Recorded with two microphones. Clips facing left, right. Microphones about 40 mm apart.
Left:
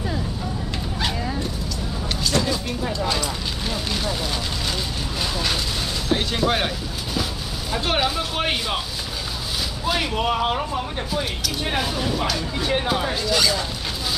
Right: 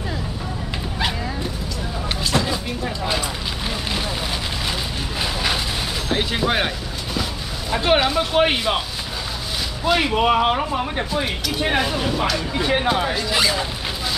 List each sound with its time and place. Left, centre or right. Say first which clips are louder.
2.2 s a sound: even; centre
5.2 s a sound: right 2 dB; centre
6.0 s speech: even; centre
7.7 s speech: right 5 dB; centre
9.9 s speech: right 5 dB; right
13.3 s speech: left 1 dB; right